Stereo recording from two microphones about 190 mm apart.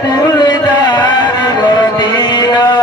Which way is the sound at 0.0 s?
20° left (ahead or behind).